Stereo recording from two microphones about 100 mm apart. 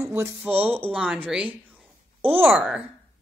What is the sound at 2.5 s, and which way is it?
Speech, 5° right (ahead or behind).